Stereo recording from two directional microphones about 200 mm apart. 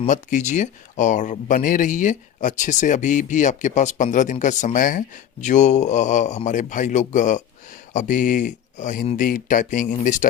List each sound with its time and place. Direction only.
0.1 s speech: 40° left (ahead or behind)